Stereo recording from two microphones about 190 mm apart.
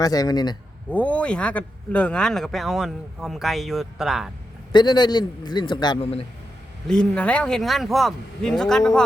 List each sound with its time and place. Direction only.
0.0 s a man's voice: 20° left (ahead or behind)
0.9 s speech: 10° left (ahead or behind)
4.7 s a man's voice: 25° left (ahead or behind)
6.8 s speech: 5° left (ahead or behind)